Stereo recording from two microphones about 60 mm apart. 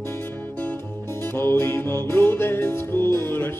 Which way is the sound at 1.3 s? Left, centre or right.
Left.